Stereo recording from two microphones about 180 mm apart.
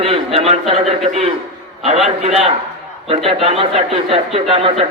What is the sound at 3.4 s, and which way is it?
Speech, 30° right (ahead or behind).